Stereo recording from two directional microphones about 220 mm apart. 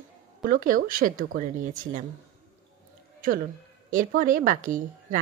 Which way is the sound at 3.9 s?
35° right (ahead or behind).